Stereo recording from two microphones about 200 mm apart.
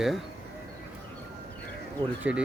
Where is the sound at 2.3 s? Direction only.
5° right (ahead or behind).